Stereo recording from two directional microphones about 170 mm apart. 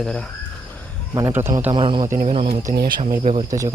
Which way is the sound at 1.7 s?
30° right (ahead or behind).